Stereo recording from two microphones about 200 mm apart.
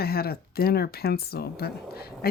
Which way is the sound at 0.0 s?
50° left (ahead or behind).